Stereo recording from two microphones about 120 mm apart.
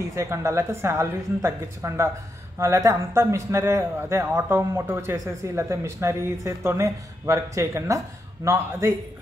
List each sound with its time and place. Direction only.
0.0 s a man's voice: 25° right (ahead or behind)